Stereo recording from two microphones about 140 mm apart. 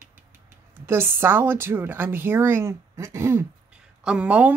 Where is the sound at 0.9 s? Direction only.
15° right (ahead or behind).